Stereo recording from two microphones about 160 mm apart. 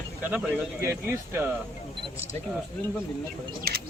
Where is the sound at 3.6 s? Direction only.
70° right (ahead or behind).